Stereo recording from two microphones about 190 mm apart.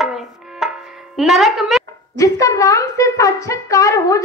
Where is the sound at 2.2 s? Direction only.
15° left (ahead or behind).